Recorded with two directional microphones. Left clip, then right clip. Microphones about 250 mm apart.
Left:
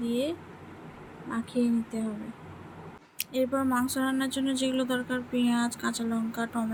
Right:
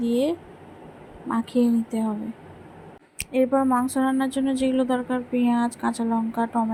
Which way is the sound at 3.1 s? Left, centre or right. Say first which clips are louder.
Right 7 dB; right.